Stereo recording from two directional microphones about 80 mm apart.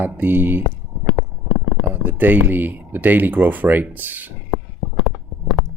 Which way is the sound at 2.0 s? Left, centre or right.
Right.